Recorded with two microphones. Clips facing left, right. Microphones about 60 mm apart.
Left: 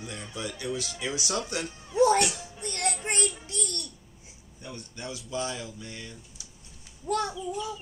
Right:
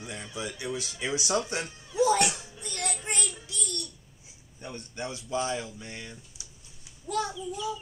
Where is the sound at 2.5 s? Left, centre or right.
Left.